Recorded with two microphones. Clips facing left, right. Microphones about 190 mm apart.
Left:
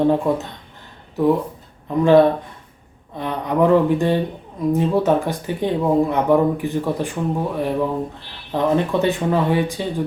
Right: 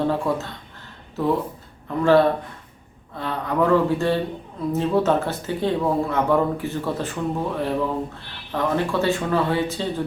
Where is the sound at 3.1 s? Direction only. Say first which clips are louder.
Left 3 dB; 20° left (ahead or behind).